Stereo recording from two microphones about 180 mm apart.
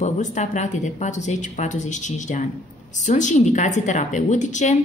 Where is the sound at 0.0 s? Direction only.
40° left (ahead or behind).